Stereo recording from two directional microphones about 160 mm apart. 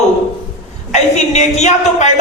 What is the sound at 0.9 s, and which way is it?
Speech, 45° left (ahead or behind).